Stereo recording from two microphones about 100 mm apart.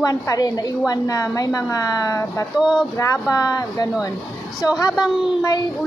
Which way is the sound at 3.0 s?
40° left (ahead or behind).